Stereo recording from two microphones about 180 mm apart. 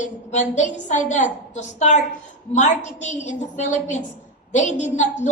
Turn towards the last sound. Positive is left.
turn(degrees=40)  # may be behind; listen again after turning